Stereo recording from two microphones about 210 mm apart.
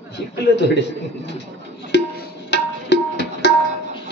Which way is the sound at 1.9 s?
55° left (ahead or behind).